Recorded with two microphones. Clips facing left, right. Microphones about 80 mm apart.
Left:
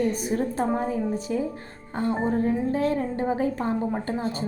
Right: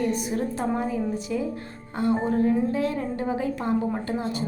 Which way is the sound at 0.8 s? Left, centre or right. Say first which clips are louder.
Left 1 dB; left.